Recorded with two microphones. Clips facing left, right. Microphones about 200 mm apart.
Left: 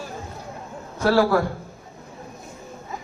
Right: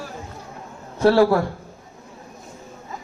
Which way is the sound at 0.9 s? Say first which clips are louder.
Right 3 dB; 30° right (ahead or behind).